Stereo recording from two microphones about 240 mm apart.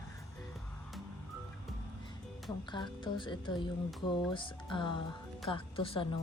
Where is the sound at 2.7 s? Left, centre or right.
Centre.